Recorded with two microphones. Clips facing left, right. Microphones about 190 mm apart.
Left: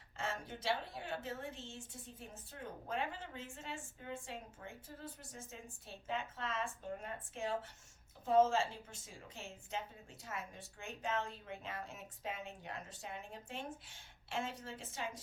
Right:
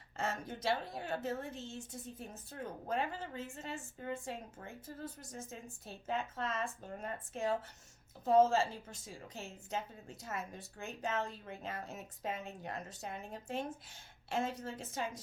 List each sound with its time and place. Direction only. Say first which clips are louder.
0.2 s a woman's voice: right 4 dB; 40° right (ahead or behind)